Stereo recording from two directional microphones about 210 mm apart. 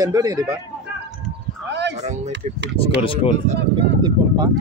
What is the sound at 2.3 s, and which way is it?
Speech, 55° right (ahead or behind).